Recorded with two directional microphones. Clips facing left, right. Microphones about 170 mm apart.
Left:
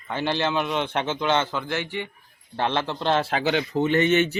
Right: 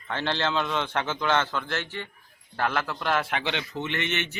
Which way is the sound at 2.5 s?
25° left (ahead or behind).